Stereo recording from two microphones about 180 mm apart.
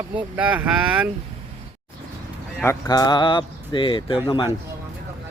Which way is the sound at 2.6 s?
15° left (ahead or behind).